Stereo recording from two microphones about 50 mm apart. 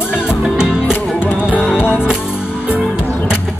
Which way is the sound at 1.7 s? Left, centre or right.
Left.